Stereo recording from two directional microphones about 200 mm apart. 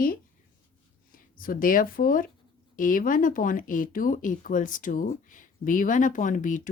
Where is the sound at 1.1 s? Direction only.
45° left (ahead or behind).